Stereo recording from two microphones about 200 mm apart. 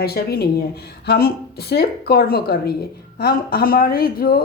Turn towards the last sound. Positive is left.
turn(degrees=50)  # may be behind; listen again after turning